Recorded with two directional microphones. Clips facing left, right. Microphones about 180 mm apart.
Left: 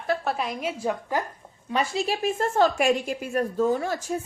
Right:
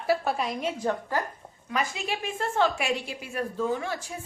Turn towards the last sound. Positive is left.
turn(degrees=40)  # may be behind; listen again after turning